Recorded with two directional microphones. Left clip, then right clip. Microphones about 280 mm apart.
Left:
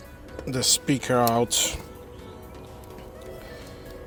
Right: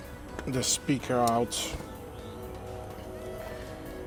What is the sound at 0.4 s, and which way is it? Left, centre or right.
Speech, centre.